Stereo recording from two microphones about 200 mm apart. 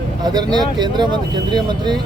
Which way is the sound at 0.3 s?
20° right (ahead or behind).